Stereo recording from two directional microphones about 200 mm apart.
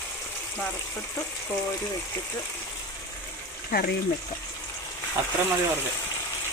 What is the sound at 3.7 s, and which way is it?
Speech, 50° left (ahead or behind).